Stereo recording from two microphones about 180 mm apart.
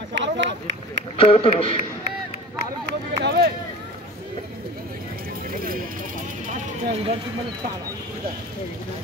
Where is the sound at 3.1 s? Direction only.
65° right (ahead or behind).